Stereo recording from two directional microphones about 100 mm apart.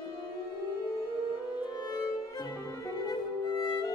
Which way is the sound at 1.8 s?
40° left (ahead or behind).